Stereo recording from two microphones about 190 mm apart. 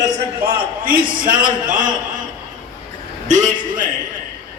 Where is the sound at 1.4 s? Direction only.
45° right (ahead or behind).